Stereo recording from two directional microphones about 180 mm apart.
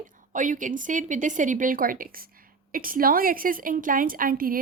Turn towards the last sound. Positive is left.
turn(degrees=-50)  # may be behind; listen again after turning